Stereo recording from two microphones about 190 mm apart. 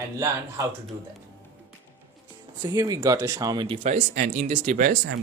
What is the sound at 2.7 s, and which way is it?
Speech, 20° right (ahead or behind).